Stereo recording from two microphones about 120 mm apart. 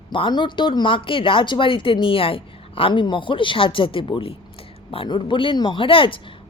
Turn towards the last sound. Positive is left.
turn(degrees=45)  # may be behind; listen again after turning